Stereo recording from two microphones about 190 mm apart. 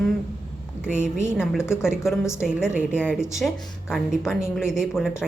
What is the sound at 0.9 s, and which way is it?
Speech, 40° right (ahead or behind).